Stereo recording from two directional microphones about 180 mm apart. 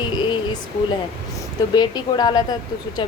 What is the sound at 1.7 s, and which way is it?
Speech, 25° left (ahead or behind).